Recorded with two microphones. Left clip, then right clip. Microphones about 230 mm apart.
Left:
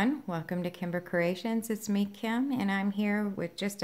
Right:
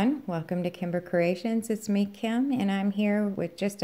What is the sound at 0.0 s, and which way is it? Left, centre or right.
A woman's voice, centre.